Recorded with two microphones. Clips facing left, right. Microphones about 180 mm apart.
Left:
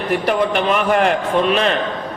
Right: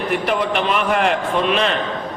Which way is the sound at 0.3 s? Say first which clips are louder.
Left 4 dB; 45° left (ahead or behind).